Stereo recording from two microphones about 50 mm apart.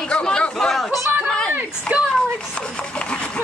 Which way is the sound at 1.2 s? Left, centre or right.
Centre.